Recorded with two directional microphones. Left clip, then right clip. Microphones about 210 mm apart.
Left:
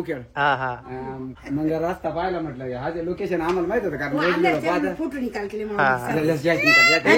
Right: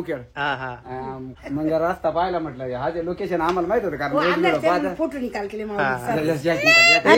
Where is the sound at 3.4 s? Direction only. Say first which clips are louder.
Right 3 dB; centre (ahead or behind).